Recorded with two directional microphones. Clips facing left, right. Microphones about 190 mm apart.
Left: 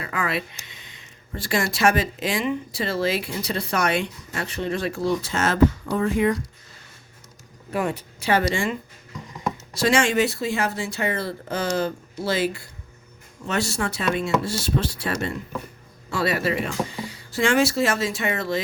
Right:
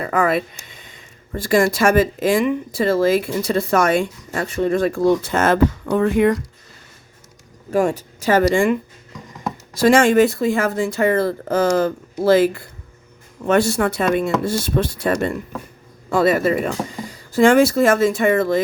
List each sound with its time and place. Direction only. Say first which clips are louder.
0.0 s speech: right 9 dB; 45° right (ahead or behind); by 6.3 s 65° right (ahead or behind)
7.7 s speech: right 7 dB; 40° right (ahead or behind)
9.8 s speech: right 7 dB; 50° right (ahead or behind)